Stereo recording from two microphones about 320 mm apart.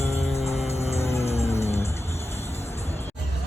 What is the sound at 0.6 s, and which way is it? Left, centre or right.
Music, centre.